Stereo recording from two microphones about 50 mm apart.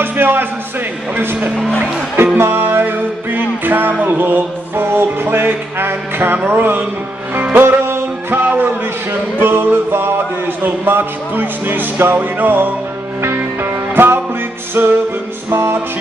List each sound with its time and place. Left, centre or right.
0.0 s speech: right
1.1 s music: right